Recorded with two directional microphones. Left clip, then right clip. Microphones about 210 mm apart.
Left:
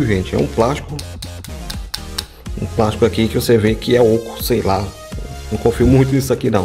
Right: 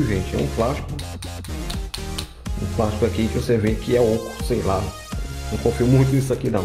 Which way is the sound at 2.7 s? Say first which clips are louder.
Left 7 dB; 45° left (ahead or behind).